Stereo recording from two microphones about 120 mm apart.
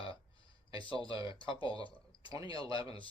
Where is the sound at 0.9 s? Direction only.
35° right (ahead or behind).